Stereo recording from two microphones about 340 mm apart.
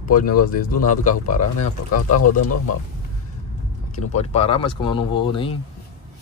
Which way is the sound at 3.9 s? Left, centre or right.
Centre.